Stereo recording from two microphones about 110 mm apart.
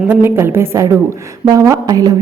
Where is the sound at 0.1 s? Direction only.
20° right (ahead or behind).